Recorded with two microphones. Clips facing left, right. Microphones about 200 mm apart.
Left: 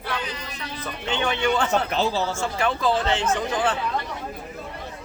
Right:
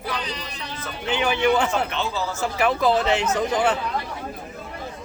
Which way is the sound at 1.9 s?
35° left (ahead or behind).